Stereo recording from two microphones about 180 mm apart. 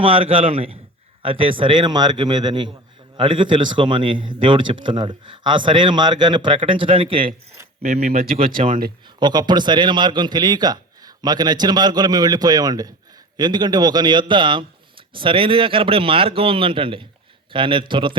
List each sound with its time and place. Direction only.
0.0 s a man's voice: 30° right (ahead or behind)
9.1 s a man's voice: 25° right (ahead or behind)